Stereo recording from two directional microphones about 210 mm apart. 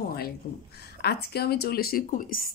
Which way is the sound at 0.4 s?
45° left (ahead or behind).